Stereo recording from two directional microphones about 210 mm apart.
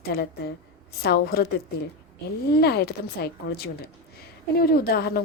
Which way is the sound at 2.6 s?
50° left (ahead or behind).